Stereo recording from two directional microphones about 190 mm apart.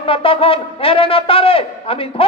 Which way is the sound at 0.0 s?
30° left (ahead or behind).